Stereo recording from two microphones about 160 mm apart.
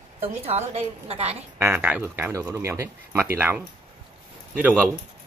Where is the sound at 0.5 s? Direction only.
40° right (ahead or behind).